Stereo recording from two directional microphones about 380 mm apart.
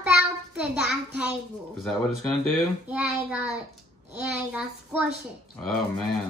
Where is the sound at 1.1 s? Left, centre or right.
Centre.